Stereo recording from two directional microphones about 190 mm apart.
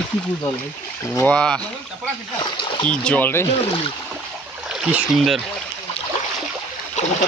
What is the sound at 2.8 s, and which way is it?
Speech, 5° left (ahead or behind).